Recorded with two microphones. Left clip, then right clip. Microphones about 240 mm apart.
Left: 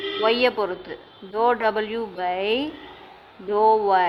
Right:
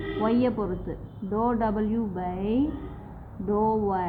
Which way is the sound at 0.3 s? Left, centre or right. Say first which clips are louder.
Left 7 dB; left.